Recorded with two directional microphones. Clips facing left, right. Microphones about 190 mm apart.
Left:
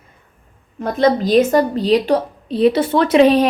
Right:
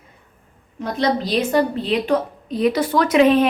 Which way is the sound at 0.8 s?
50° left (ahead or behind).